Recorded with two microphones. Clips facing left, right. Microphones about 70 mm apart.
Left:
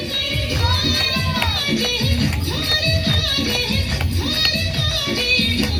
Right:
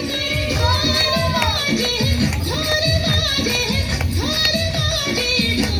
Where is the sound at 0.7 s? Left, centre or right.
Right.